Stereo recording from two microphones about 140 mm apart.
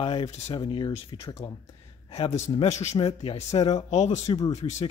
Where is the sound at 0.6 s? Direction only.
35° left (ahead or behind); by 3.0 s 50° left (ahead or behind).